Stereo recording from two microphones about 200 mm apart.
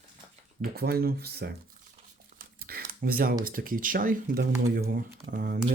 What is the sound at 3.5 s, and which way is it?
Speech, 45° right (ahead or behind).